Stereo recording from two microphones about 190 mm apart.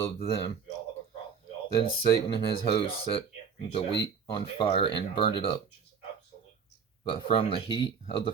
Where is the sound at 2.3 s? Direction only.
25° left (ahead or behind).